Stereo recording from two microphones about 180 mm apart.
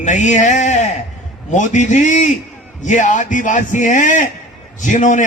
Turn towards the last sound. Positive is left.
turn(degrees=45)  # may be behind; listen again after turning